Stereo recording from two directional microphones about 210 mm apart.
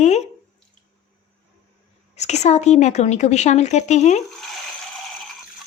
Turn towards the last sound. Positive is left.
turn(degrees=35)  # may be behind; listen again after turning